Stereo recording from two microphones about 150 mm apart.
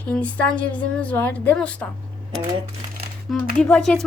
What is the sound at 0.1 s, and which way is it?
A woman's voice, 10° left (ahead or behind).